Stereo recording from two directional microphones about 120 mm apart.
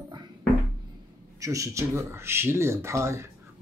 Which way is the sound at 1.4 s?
25° right (ahead or behind).